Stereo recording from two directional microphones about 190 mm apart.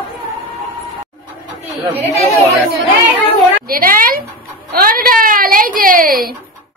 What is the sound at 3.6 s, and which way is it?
Speech, 50° right (ahead or behind).